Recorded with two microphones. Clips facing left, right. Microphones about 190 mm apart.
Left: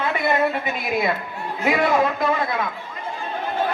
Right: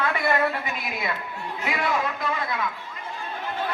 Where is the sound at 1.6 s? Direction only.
50° left (ahead or behind).